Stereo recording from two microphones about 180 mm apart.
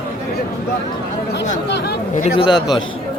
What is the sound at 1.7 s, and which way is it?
Speech, 65° left (ahead or behind).